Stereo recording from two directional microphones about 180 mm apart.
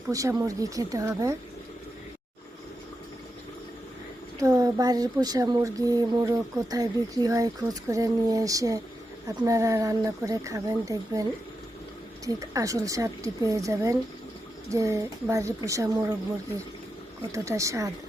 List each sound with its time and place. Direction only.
0.1 s speech: 20° right (ahead or behind)
4.4 s speech: 20° right (ahead or behind)
17.3 s speech: 15° right (ahead or behind)